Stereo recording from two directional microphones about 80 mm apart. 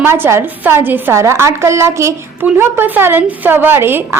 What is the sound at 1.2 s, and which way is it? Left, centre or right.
A woman's voice, right.